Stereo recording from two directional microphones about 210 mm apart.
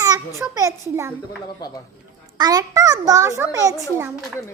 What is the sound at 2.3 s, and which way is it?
A child's voice, 20° right (ahead or behind).